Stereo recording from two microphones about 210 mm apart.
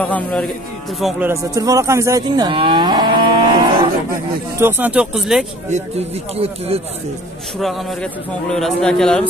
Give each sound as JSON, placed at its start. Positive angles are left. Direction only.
{"t": 0.0, "sound": "a man's voice", "side_deg": 5}
{"t": 1.3, "sound": "speech", "side_deg": -15}
{"t": 4.6, "sound": "a man's voice", "side_deg": -10}
{"t": 5.7, "sound": "speech", "side_deg": -30}
{"t": 7.5, "sound": "a man's voice", "side_deg": 0}